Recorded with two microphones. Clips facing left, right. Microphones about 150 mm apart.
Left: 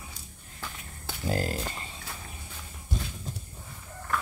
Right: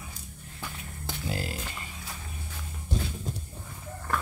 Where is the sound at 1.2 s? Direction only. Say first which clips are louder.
Left 6 dB; 40° left (ahead or behind).